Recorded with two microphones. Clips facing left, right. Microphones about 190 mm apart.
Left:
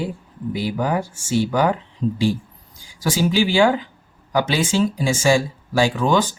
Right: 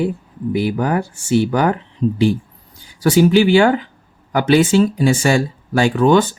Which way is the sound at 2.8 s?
60° right (ahead or behind).